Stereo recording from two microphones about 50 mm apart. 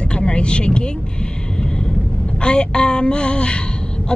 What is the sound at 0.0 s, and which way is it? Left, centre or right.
Vehicle, centre.